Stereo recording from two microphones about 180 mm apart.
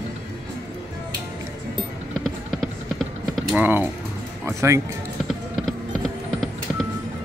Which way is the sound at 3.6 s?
10° right (ahead or behind).